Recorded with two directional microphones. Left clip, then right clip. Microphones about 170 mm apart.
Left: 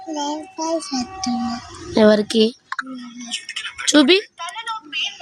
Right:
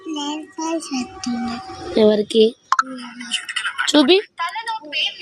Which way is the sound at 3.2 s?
15° right (ahead or behind).